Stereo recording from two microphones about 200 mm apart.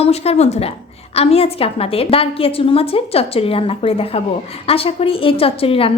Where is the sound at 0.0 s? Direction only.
30° left (ahead or behind).